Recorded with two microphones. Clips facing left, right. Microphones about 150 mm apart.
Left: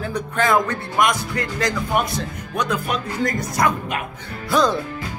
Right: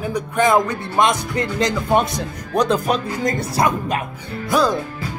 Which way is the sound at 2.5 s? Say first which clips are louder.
Right 6 dB; 35° right (ahead or behind).